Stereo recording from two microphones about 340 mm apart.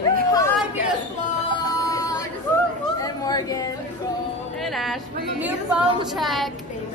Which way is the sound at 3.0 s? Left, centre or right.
Centre.